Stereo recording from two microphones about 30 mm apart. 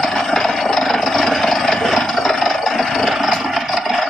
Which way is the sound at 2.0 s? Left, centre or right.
Centre.